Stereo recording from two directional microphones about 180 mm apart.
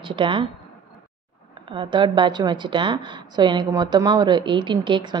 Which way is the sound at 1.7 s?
25° right (ahead or behind).